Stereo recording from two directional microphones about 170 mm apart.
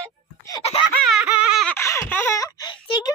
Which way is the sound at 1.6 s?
15° left (ahead or behind).